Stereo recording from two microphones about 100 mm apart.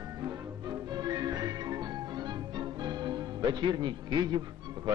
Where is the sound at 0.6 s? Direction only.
45° right (ahead or behind).